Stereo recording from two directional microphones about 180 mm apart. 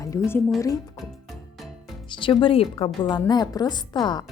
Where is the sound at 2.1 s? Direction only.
25° left (ahead or behind).